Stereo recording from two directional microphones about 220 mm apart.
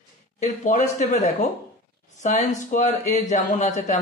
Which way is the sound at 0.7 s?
35° left (ahead or behind).